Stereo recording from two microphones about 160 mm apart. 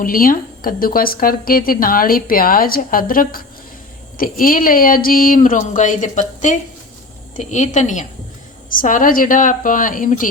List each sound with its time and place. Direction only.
0.0 s a woman's voice: 60° left (ahead or behind)